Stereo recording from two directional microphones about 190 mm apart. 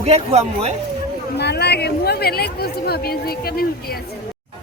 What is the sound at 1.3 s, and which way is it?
Speech, 60° left (ahead or behind).